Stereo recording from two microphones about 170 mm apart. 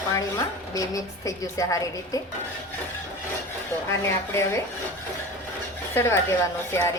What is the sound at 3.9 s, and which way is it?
Speech, 15° left (ahead or behind).